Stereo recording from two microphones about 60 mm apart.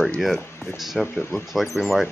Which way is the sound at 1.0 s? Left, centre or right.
Left.